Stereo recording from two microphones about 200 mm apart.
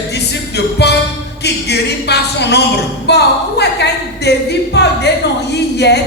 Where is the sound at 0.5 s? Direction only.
55° left (ahead or behind).